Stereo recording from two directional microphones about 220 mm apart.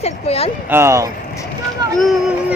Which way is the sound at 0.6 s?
10° right (ahead or behind).